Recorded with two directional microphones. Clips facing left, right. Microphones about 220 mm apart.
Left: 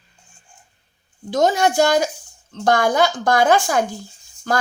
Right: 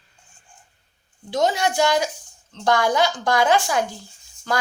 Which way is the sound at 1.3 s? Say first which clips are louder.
Left 4 dB; 45° left (ahead or behind).